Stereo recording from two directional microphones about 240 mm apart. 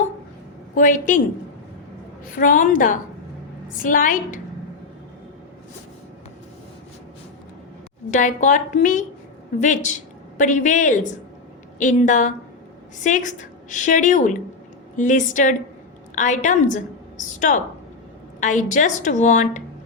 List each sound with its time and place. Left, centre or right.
0.7 s a woman's voice: left
2.3 s a woman's voice: left
8.1 s a woman's voice: left